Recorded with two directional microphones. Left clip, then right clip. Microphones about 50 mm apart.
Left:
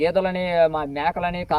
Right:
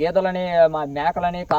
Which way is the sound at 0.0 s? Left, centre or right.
Right.